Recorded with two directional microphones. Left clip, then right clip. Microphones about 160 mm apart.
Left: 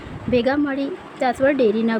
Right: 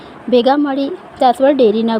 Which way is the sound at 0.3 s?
20° right (ahead or behind).